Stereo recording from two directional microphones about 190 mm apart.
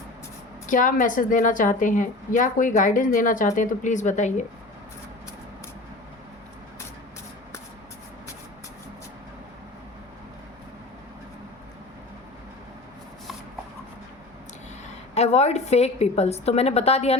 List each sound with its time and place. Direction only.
0.7 s a woman's voice: 45° left (ahead or behind)
15.1 s a woman's voice: 35° left (ahead or behind)